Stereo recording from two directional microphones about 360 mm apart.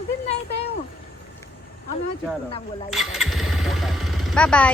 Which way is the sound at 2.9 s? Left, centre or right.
Centre.